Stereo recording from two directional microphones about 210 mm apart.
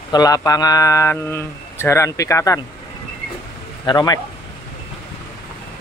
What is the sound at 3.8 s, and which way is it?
Speech, 20° left (ahead or behind).